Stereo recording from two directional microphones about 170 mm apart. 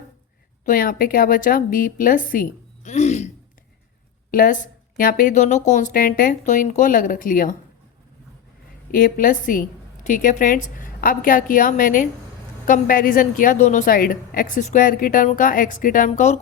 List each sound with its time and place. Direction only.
0.6 s a woman's voice: 55° left (ahead or behind)
4.3 s a woman's voice: 55° left (ahead or behind)
8.9 s a woman's voice: 55° left (ahead or behind)